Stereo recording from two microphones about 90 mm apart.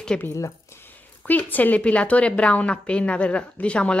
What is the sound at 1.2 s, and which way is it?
A woman's voice, 15° left (ahead or behind).